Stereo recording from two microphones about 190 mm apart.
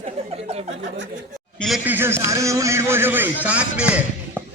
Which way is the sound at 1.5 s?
Centre (ahead or behind).